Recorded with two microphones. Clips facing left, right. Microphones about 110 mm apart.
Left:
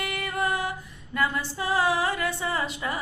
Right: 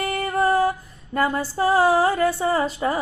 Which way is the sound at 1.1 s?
40° right (ahead or behind).